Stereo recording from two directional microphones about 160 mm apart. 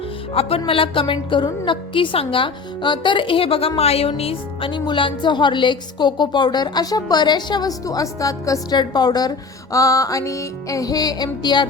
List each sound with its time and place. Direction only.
0.3 s a woman's voice: 35° left (ahead or behind)